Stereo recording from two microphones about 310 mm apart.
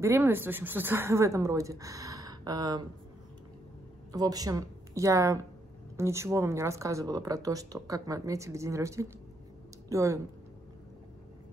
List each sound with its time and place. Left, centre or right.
0.0 s speech: centre
4.1 s speech: centre